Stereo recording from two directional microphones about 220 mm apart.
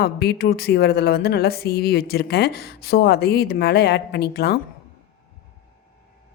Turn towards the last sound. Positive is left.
turn(degrees=45)  # may be behind; listen again after turning